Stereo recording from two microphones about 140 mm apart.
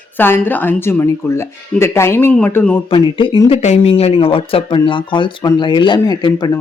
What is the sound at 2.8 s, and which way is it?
Speech, 35° left (ahead or behind).